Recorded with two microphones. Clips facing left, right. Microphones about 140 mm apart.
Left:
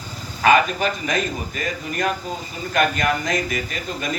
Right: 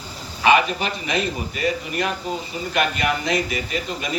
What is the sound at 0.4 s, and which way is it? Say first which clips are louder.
A man's voice: left 1 dB; 45° left (ahead or behind).